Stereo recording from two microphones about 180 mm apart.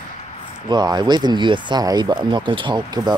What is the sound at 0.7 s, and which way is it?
Speech, 25° right (ahead or behind).